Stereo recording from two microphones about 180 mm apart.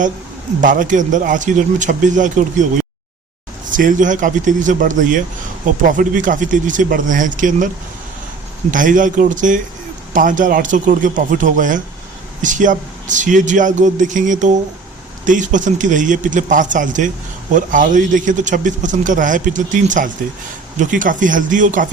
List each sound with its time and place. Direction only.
0.6 s a man's voice: 45° right (ahead or behind)
3.7 s a man's voice: 50° right (ahead or behind)
8.7 s a man's voice: 45° right (ahead or behind)